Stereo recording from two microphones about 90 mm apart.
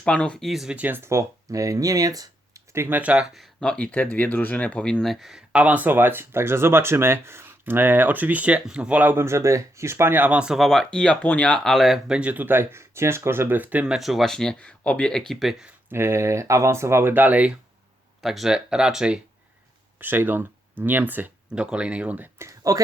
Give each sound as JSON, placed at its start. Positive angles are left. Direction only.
{"t": 0.0, "sound": "speech", "side_deg": 10}
{"t": 0.8, "sound": "speech", "side_deg": -20}
{"t": 2.7, "sound": "speech", "side_deg": -25}
{"t": 3.0, "sound": "speech", "side_deg": -15}
{"t": 3.3, "sound": "speech", "side_deg": 5}
{"t": 5.1, "sound": "speech", "side_deg": 0}
{"t": 5.5, "sound": "speech", "side_deg": -15}
{"t": 10.6, "sound": "speech", "side_deg": 5}
{"t": 15.9, "sound": "speech", "side_deg": -30}
{"t": 18.2, "sound": "speech", "side_deg": 0}
{"t": 20.0, "sound": "speech", "side_deg": -20}
{"t": 22.4, "sound": "speech", "side_deg": -35}